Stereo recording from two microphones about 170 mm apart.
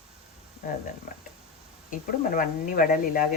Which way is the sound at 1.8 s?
55° left (ahead or behind).